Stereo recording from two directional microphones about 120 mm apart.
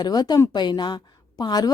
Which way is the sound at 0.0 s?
35° left (ahead or behind).